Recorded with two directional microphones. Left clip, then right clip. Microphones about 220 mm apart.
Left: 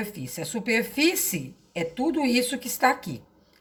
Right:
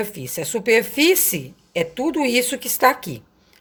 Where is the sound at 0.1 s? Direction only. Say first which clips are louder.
Right 8 dB; 45° right (ahead or behind).